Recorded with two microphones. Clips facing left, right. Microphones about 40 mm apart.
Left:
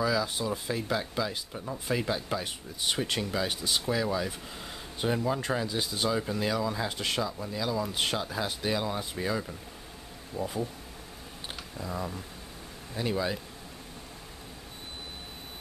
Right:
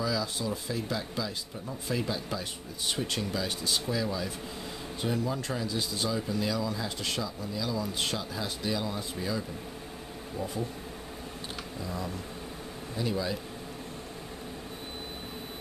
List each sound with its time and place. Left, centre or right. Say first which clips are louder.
0.0 s speech: left 3 dB; centre
4.0 s speech: left 2 dB; left
10.3 s speech: left 2 dB; centre
11.8 s speech: left 2 dB; centre
12.9 s speech: left 1 dB; left